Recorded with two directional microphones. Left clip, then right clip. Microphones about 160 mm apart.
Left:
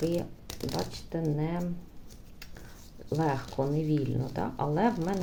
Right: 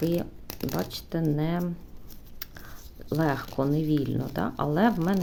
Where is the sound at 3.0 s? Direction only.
35° right (ahead or behind).